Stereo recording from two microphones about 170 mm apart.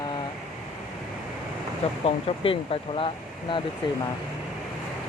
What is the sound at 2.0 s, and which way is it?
Speech, 35° left (ahead or behind).